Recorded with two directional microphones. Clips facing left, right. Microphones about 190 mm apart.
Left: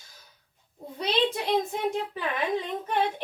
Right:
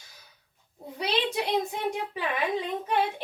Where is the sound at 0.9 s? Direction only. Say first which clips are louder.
Left 2 dB; 10° right (ahead or behind).